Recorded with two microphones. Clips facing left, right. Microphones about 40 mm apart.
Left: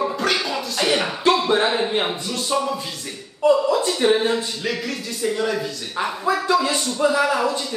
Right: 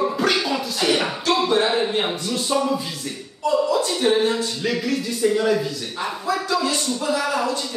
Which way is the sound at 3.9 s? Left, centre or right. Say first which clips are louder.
Left 1 dB; centre.